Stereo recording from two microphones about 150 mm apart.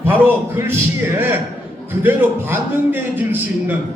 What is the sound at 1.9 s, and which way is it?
A man's voice, 15° right (ahead or behind).